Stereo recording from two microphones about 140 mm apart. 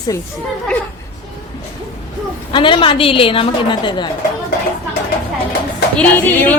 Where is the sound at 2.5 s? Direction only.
35° left (ahead or behind).